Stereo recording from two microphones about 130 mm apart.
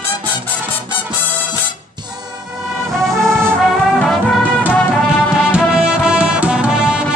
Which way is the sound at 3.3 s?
20° right (ahead or behind).